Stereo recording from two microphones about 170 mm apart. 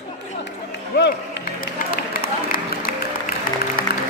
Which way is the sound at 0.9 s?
90° left.